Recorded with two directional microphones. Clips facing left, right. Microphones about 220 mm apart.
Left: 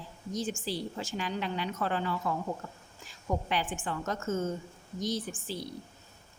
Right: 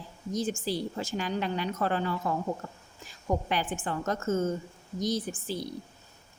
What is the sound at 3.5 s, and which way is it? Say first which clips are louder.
A woman's voice: right 2 dB; 40° right (ahead or behind).